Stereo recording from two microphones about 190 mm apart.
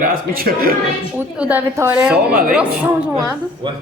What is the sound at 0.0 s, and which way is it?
Speech, 50° right (ahead or behind).